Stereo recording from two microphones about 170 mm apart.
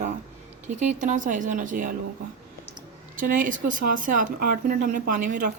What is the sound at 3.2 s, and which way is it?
Speech, 55° right (ahead or behind).